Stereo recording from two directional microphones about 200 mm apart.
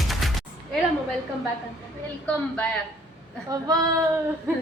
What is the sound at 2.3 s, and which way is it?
Speech, 5° left (ahead or behind).